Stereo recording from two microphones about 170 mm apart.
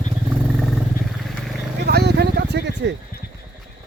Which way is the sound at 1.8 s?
75° right (ahead or behind).